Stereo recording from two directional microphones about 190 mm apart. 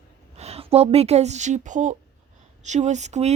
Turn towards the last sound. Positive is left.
turn(degrees=-35)  # may be behind; listen again after turning